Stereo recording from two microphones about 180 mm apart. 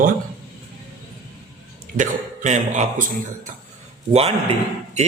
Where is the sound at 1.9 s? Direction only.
45° right (ahead or behind).